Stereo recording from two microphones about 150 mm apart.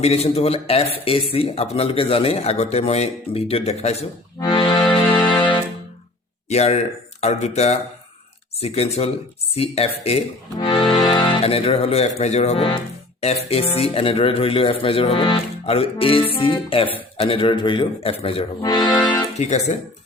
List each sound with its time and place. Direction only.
0.0 s a man's voice: 45° left (ahead or behind)
4.4 s accordion: 35° left (ahead or behind)
5.0 s music: 10° left (ahead or behind)
6.5 s a man's voice: 45° left (ahead or behind)
18.6 s speech: 25° left (ahead or behind)
19.4 s a man's voice: 50° left (ahead or behind)